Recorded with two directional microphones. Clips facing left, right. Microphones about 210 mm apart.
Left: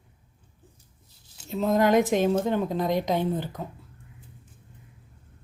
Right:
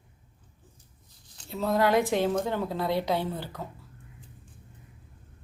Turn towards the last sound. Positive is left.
turn(degrees=15)  # may be behind; listen again after turning